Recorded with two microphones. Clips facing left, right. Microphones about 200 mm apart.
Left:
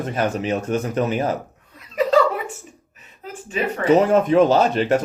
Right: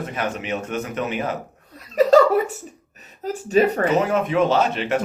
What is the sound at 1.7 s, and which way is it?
Chuckle, 40° right (ahead or behind).